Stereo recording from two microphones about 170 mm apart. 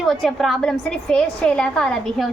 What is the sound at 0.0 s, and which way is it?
A woman's voice, centre (ahead or behind).